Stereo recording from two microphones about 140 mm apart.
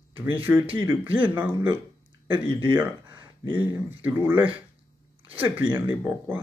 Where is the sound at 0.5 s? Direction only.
15° right (ahead or behind).